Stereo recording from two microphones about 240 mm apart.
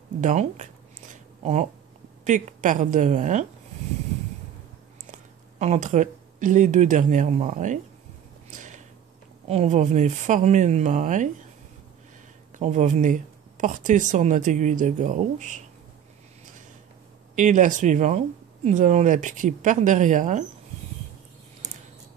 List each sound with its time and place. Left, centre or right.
0.2 s a sound: right
2.2 s speech: right
5.1 s speech: right
8.5 s a sound: right
9.5 s speech: right
12.5 s speech: right
17.4 s speech: right